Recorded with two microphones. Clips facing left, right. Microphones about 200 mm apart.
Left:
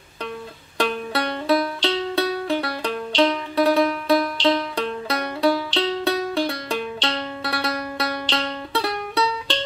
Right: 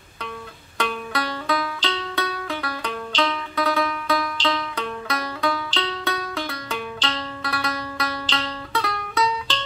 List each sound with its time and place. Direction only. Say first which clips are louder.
0.7 s music: left 3 dB; 30° left (ahead or behind)